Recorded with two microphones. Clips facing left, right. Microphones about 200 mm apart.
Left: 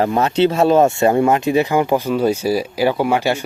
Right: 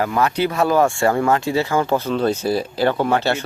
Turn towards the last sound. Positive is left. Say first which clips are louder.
# left 2 dB
turn(degrees=10)  # may be behind; listen again after turning